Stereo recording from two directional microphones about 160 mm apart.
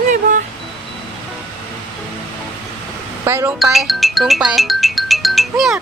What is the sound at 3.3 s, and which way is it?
Speech, 15° right (ahead or behind).